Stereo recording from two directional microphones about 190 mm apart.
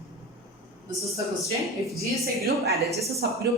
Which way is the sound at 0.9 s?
15° right (ahead or behind).